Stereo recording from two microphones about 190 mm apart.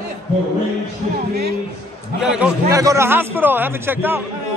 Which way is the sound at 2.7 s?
15° right (ahead or behind).